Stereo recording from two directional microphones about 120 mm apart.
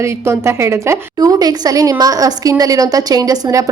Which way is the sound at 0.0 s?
25° right (ahead or behind).